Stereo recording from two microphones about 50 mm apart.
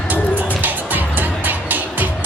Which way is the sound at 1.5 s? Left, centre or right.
Right.